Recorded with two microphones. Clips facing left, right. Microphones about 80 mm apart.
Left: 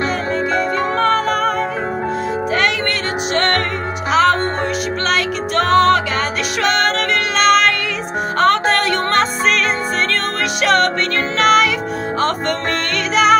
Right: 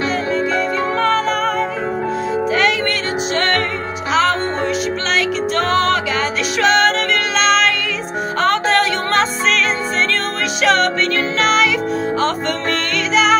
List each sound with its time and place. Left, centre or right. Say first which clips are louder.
0.9 s music: left 1 dB; left
3.3 s music: left 2 dB; left